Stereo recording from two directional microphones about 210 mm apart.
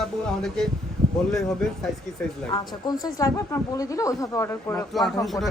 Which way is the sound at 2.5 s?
20° left (ahead or behind).